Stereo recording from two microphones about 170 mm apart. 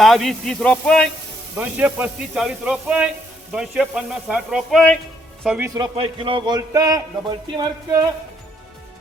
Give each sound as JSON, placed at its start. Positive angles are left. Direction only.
{"t": 0.0, "sound": "speech", "side_deg": 0}
{"t": 1.5, "sound": "speech", "side_deg": -10}
{"t": 5.5, "sound": "a man's voice", "side_deg": -20}
{"t": 6.0, "sound": "a man's voice", "side_deg": -30}